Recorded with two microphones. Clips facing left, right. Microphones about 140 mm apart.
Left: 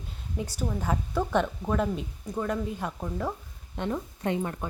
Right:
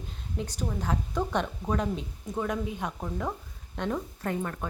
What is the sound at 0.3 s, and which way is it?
A woman's voice, 5° left (ahead or behind).